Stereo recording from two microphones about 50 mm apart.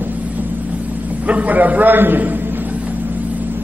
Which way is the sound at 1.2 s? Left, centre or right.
Right.